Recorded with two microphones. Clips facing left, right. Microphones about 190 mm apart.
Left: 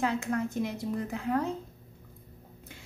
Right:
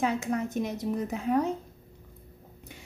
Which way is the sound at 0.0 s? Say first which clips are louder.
Right 1 dB; 15° right (ahead or behind).